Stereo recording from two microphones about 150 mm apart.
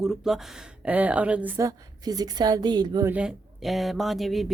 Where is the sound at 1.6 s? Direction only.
25° right (ahead or behind).